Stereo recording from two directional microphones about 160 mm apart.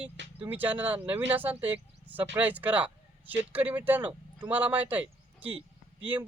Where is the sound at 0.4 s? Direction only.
10° right (ahead or behind).